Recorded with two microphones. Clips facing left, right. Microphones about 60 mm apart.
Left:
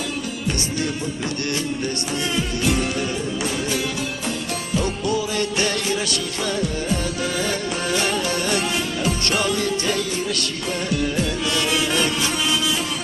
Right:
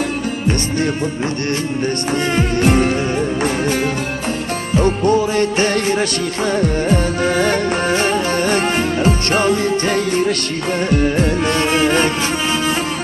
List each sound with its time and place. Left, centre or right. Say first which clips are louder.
2.3 s music: right 7 dB; right
4.8 s music: right 10 dB; right